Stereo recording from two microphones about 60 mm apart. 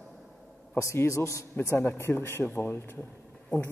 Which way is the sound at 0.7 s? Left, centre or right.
Left.